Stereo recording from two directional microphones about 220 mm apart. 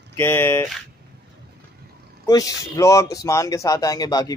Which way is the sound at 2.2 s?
15° left (ahead or behind).